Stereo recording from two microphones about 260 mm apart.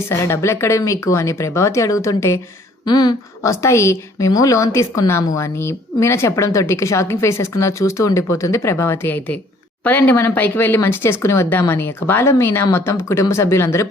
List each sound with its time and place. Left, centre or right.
0.1 s a woman's voice: centre